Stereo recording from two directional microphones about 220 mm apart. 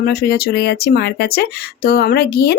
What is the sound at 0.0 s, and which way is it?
Speech, 45° left (ahead or behind).